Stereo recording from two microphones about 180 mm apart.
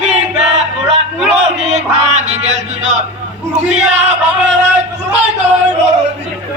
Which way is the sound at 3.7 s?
40° right (ahead or behind).